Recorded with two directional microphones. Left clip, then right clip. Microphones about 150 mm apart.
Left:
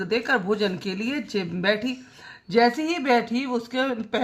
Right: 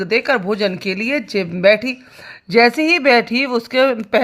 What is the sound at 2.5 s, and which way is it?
Speech, 40° right (ahead or behind).